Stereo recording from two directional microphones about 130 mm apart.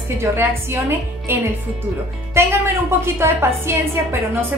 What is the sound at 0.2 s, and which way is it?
A woman's voice, 20° right (ahead or behind).